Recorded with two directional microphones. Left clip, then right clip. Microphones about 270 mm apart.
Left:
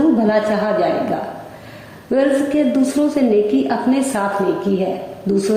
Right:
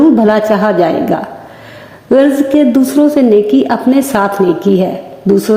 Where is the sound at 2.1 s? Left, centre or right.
Right.